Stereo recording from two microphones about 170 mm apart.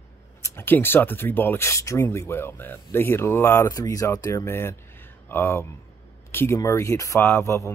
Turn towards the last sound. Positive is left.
turn(degrees=15)  # may be behind; listen again after turning